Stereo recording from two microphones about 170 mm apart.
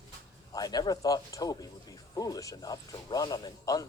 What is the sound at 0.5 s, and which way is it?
Speech, 20° left (ahead or behind).